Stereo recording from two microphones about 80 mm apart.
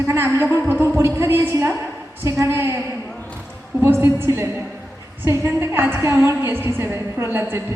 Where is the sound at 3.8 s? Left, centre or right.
Right.